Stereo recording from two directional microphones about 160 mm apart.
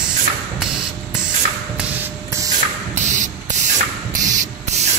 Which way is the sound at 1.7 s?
10° right (ahead or behind).